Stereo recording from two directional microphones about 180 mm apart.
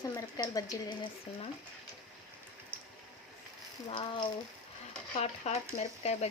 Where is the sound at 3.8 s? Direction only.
25° left (ahead or behind).